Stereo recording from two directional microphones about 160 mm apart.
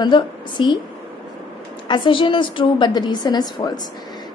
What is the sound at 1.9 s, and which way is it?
A woman's voice, 30° left (ahead or behind).